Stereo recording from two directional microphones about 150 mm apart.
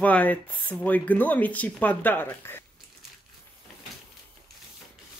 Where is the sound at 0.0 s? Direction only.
10° left (ahead or behind).